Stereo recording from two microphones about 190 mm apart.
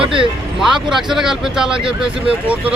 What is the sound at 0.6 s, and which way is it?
Speech, centre (ahead or behind).